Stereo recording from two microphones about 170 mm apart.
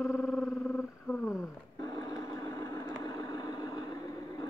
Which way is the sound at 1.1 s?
Centre (ahead or behind).